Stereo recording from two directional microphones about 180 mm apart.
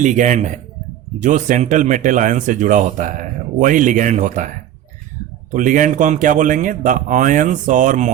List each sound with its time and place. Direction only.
0.0 s speech: 45° right (ahead or behind)